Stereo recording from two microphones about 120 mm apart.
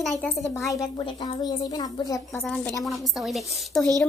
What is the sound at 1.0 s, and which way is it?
A woman's voice, 35° left (ahead or behind).